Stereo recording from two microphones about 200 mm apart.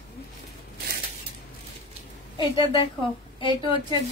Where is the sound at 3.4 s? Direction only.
25° left (ahead or behind).